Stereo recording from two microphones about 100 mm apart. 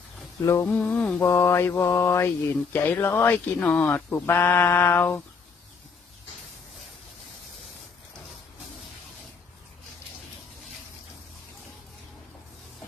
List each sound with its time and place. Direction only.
0.4 s mantra: 25° left (ahead or behind)
0.7 s a sound: 15° left (ahead or behind)
1.2 s mantra: 25° left (ahead or behind)